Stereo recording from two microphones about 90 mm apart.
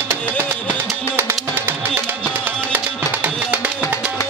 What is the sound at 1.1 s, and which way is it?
Music, 20° right (ahead or behind).